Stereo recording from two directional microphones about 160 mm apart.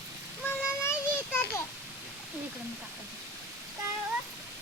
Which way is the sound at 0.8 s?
15° left (ahead or behind).